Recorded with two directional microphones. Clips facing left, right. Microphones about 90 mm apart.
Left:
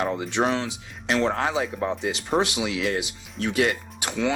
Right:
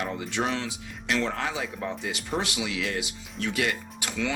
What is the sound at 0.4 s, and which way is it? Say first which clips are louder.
Speech: left 5 dB; 40° left (ahead or behind).